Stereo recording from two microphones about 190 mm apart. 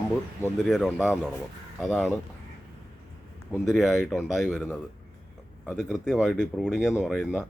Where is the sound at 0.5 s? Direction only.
Centre (ahead or behind).